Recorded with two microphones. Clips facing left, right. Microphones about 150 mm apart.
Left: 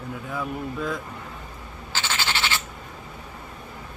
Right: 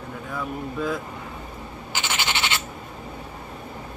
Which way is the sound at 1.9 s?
15° right (ahead or behind).